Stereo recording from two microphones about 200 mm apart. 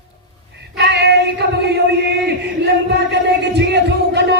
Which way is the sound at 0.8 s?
55° right (ahead or behind).